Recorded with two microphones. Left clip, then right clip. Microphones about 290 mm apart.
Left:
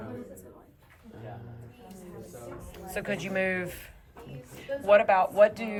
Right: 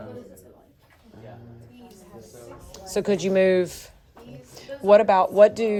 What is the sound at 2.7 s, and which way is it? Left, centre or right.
Speech, centre.